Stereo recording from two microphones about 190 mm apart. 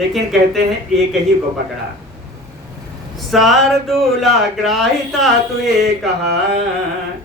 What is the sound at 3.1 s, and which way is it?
Speech, centre (ahead or behind).